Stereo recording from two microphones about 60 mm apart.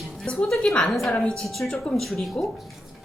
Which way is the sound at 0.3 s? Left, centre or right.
Centre.